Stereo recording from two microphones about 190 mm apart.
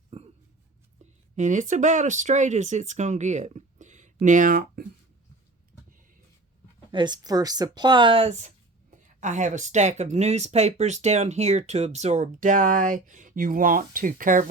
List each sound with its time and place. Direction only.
0.1 s a sound: 35° right (ahead or behind)
1.4 s speech: 40° right (ahead or behind)
6.9 s speech: 25° right (ahead or behind); by 14.4 s 45° right (ahead or behind)